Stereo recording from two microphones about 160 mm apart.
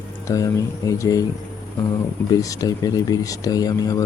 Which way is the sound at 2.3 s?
20° left (ahead or behind).